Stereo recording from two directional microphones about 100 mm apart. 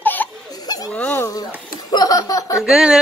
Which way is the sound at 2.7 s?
5° right (ahead or behind).